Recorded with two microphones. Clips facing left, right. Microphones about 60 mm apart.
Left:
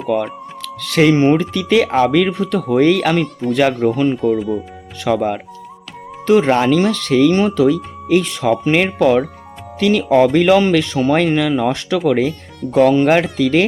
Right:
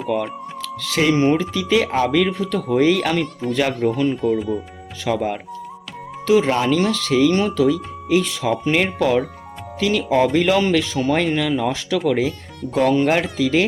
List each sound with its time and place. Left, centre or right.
0.1 s speech: left
1.1 s speech: left
4.2 s speech: centre
5.0 s speech: left
6.2 s speech: left
6.7 s speech: left
7.3 s speech: left